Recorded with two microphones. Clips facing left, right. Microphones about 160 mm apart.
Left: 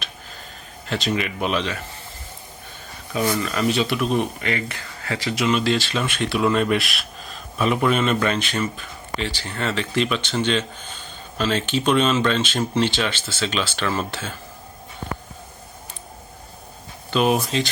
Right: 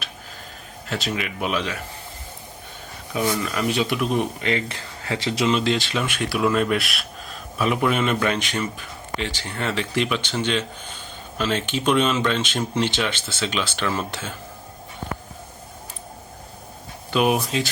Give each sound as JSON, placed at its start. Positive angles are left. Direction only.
{"t": 0.9, "sound": "speech", "side_deg": -5}
{"t": 3.4, "sound": "speech", "side_deg": -15}
{"t": 17.1, "sound": "speech", "side_deg": -10}